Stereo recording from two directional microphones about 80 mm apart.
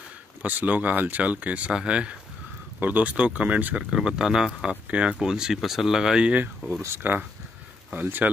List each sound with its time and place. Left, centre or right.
0.4 s speech: right